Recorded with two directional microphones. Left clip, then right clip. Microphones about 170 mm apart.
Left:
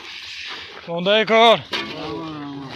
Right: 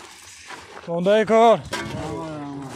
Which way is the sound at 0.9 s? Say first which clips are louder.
Left 1 dB; 30° right (ahead or behind).